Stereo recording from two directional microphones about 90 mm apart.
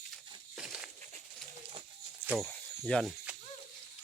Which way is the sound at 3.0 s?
10° right (ahead or behind).